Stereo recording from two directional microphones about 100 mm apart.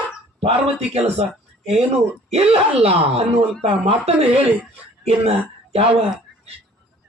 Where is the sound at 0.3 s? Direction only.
90° right.